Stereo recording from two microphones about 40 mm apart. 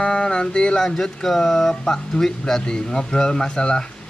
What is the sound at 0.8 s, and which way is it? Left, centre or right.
Speech, centre.